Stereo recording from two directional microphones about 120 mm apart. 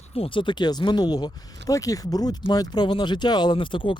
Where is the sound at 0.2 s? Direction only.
45° left (ahead or behind).